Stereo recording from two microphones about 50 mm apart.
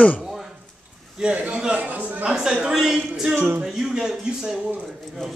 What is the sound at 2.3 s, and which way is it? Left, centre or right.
A man's voice, centre.